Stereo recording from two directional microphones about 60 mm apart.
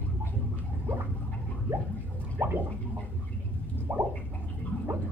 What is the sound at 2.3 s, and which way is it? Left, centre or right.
Gargling, right.